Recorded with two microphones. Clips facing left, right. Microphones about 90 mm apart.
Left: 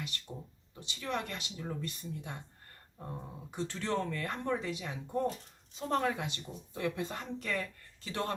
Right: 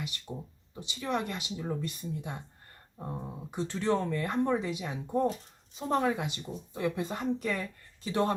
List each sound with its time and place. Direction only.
0.0 s speech: 15° right (ahead or behind)